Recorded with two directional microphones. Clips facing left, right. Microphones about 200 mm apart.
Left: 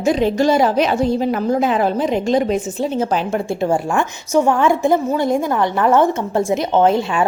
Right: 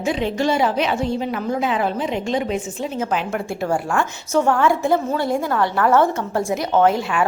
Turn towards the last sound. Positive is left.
turn(degrees=25)  # may be behind; listen again after turning